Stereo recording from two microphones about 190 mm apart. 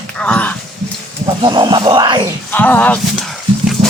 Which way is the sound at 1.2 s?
25° right (ahead or behind).